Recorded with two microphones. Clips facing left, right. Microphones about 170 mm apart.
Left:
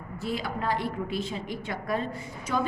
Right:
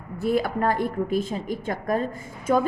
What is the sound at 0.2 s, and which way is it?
A woman's voice, 55° right (ahead or behind).